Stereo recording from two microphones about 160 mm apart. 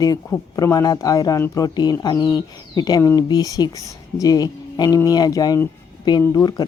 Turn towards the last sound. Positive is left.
turn(degrees=25)  # may be behind; listen again after turning